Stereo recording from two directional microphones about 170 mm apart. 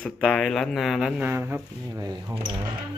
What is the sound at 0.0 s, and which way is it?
Speech, 5° left (ahead or behind).